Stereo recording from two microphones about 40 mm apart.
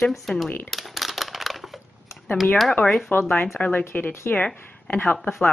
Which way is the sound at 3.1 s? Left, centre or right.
Left.